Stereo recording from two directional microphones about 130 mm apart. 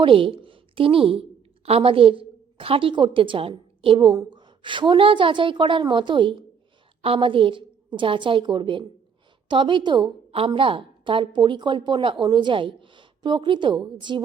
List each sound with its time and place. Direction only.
0.0 s a woman's voice: 40° right (ahead or behind)